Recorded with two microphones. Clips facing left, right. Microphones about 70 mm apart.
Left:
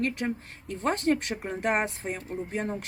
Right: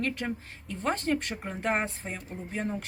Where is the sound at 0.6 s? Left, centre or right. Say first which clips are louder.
Left 4 dB; left.